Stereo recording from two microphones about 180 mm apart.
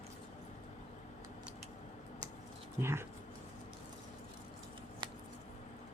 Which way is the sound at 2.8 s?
15° right (ahead or behind).